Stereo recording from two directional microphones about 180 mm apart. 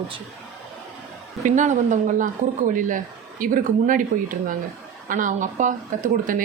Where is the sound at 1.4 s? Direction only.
45° right (ahead or behind).